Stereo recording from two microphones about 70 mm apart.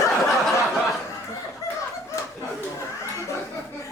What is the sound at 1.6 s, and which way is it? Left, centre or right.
Chicken, left.